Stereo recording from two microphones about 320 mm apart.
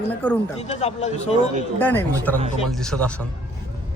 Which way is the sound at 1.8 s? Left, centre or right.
Centre.